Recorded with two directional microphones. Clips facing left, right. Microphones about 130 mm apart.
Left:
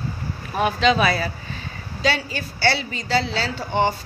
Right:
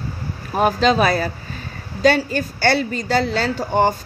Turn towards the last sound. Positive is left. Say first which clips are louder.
# right 4 dB
turn(degrees=-45)  # may be behind; listen again after turning